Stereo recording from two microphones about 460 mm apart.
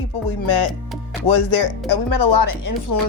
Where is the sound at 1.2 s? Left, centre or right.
Left.